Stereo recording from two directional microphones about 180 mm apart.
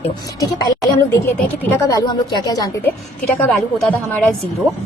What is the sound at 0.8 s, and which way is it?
A woman's voice, 15° left (ahead or behind).